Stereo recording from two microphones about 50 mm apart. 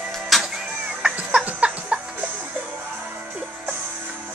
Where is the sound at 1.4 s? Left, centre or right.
Right.